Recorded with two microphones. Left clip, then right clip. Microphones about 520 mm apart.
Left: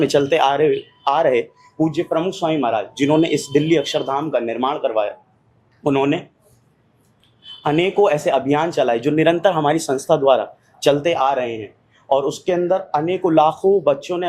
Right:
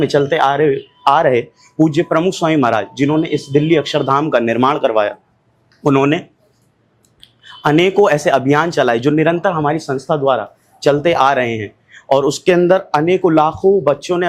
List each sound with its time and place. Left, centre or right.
0.0 s speech: right
3.0 s speech: right
7.6 s speech: right